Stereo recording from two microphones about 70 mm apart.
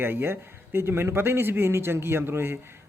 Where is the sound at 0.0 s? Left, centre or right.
Right.